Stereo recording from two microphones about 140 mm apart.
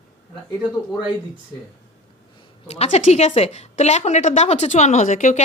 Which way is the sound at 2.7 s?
50° left (ahead or behind).